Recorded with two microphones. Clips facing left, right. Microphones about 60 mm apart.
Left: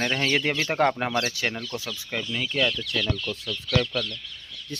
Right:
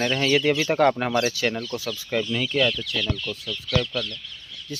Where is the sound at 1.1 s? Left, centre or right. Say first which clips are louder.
Right 4 dB; centre.